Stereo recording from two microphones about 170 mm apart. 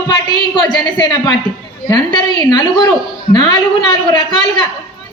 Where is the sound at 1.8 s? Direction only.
25° left (ahead or behind).